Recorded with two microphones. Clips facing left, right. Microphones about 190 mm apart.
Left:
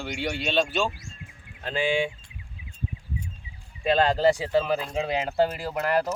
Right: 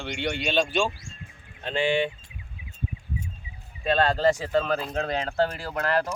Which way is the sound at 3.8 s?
15° left (ahead or behind).